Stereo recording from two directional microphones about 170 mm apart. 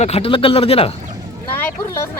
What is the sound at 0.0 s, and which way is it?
Speech, 35° left (ahead or behind).